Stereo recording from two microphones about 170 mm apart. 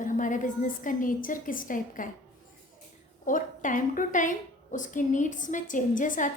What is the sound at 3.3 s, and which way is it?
A woman's voice, 50° left (ahead or behind).